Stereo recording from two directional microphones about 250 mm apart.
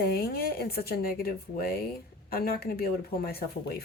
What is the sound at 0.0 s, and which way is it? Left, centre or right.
Speech, left.